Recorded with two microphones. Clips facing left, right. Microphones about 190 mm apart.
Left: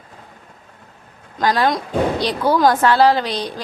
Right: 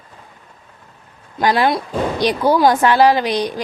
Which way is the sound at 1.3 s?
10° right (ahead or behind).